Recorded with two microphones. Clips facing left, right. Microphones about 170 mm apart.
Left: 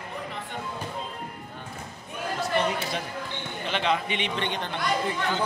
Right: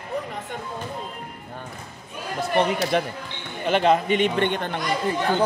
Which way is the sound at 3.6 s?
45° right (ahead or behind).